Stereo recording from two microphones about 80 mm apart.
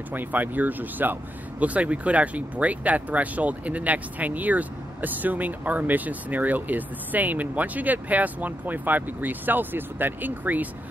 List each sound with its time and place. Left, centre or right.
0.1 s speech: right